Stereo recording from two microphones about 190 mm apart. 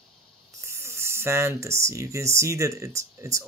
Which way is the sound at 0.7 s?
15° right (ahead or behind).